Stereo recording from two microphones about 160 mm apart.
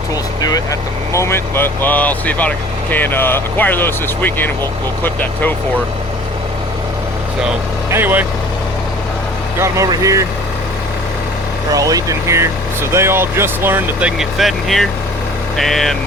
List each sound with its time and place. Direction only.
0.4 s speech: 20° left (ahead or behind)
7.9 s speech: 15° right (ahead or behind)
9.6 s speech: 20° right (ahead or behind)
11.7 s speech: 20° right (ahead or behind)
14.2 s speech: centre (ahead or behind)